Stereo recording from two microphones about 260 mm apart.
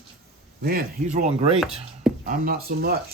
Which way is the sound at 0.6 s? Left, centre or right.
Right.